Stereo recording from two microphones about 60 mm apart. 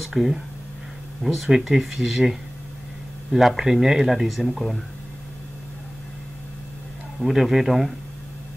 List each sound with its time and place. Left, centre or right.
0.0 s speech: centre
7.2 s speech: centre